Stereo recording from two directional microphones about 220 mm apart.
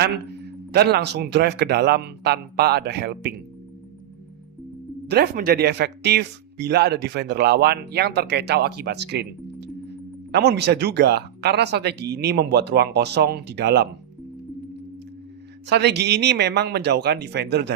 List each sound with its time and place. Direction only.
0.0 s speech: 50° right (ahead or behind)
5.0 s speech: 45° right (ahead or behind)
15.6 s speech: 50° right (ahead or behind)